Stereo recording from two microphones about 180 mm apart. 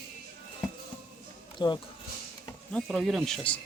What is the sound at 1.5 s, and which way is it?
Speech, 25° left (ahead or behind).